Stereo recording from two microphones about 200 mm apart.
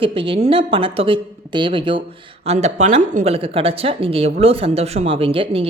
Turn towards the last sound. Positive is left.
turn(degrees=-30)  # may be behind; listen again after turning